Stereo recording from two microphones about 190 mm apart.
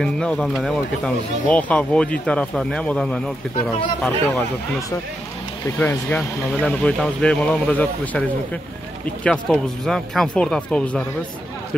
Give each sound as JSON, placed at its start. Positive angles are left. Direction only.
{"t": 0.0, "sound": "speech", "side_deg": 5}
{"t": 5.8, "sound": "speech", "side_deg": 10}
{"t": 9.2, "sound": "speech", "side_deg": 5}